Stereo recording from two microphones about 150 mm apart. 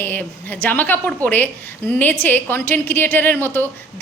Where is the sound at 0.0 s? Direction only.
15° left (ahead or behind).